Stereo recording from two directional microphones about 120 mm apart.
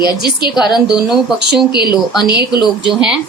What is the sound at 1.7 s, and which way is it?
Speech, 40° left (ahead or behind).